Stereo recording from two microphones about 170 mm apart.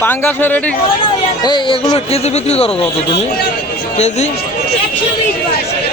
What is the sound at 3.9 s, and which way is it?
Speech, 40° left (ahead or behind).